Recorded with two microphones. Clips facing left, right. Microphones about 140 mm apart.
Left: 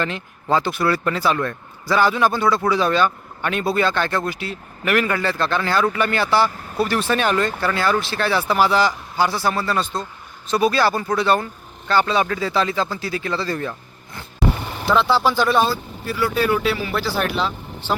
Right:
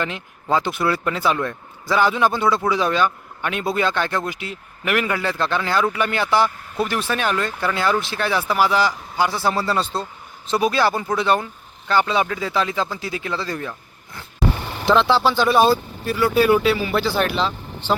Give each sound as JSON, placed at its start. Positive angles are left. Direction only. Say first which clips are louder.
{"t": 0.5, "sound": "a man's voice", "louder": "left 1 dB", "side_deg": -20}
{"t": 7.6, "sound": "speech", "louder": "left 1 dB", "side_deg": -15}
{"t": 13.7, "sound": "vehicle", "louder": "left 3 dB", "side_deg": 0}
{"t": 15.4, "sound": "speech", "louder": "right 3 dB", "side_deg": -15}